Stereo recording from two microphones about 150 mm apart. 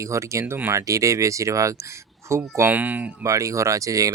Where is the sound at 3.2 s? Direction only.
20° right (ahead or behind).